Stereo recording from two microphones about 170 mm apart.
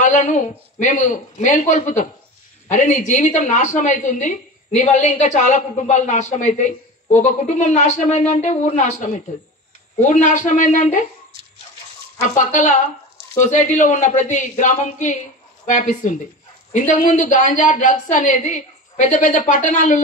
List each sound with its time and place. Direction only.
0.0 s a woman's voice: 45° left (ahead or behind)
12.4 s a woman's voice: 45° left (ahead or behind)